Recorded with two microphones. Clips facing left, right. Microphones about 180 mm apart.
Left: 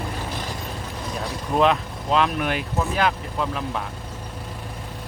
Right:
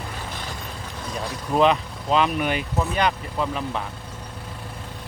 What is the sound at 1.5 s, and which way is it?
Speech, centre (ahead or behind).